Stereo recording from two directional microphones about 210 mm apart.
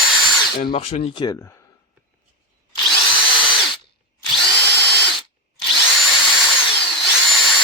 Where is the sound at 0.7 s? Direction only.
30° left (ahead or behind).